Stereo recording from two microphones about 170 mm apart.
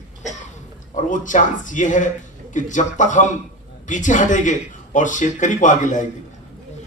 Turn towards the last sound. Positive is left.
turn(degrees=50)  # may be behind; listen again after turning